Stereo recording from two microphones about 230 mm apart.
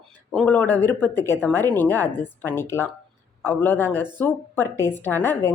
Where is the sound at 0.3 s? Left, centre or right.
Centre.